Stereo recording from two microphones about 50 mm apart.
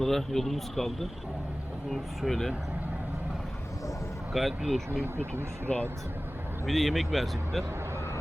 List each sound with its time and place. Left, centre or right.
0.0 s speech: centre
4.3 s speech: centre
5.6 s speech: left
6.7 s speech: centre